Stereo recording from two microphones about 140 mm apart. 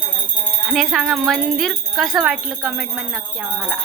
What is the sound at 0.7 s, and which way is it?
Speech, centre (ahead or behind).